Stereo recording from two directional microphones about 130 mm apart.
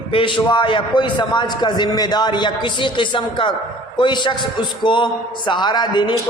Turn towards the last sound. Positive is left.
turn(degrees=35)  # may be behind; listen again after turning